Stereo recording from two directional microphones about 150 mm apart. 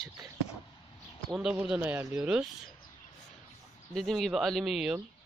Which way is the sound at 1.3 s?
5° right (ahead or behind).